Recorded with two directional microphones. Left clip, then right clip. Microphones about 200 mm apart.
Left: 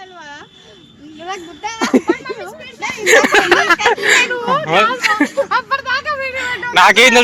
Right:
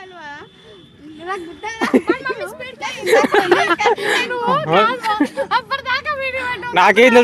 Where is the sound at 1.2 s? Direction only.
40° left (ahead or behind).